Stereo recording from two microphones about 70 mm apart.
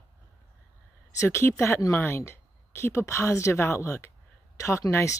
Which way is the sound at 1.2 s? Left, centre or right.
Left.